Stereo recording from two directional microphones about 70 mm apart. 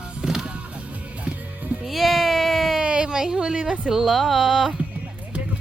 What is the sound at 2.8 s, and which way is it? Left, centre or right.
Speech, centre.